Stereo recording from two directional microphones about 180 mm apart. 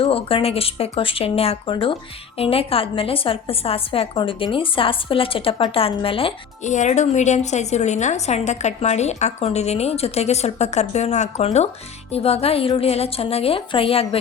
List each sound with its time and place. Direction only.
0.0 s a woman's voice: 30° left (ahead or behind)